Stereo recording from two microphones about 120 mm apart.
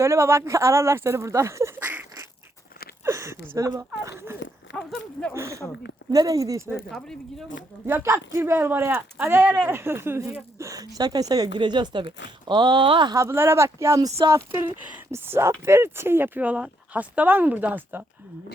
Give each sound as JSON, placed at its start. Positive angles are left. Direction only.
{"t": 0.0, "sound": "speech", "side_deg": -25}
{"t": 3.0, "sound": "a sound", "side_deg": -25}
{"t": 3.5, "sound": "speech", "side_deg": -25}
{"t": 6.9, "sound": "speech", "side_deg": 5}
{"t": 7.9, "sound": "speech", "side_deg": -20}
{"t": 13.1, "sound": "speech", "side_deg": -20}